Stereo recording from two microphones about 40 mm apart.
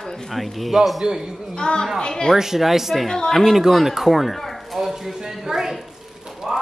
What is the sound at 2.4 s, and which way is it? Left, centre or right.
Speech, centre.